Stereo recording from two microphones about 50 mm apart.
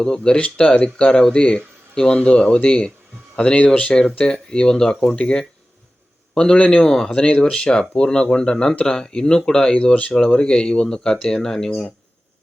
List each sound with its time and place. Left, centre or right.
0.0 s speech: centre
9.7 s speech: left